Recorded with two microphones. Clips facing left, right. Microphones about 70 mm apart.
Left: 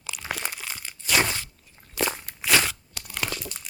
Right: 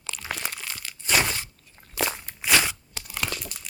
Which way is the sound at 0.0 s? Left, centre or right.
Centre.